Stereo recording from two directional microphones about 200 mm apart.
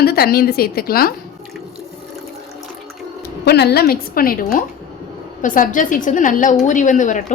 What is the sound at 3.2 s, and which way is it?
A woman's voice, 55° left (ahead or behind).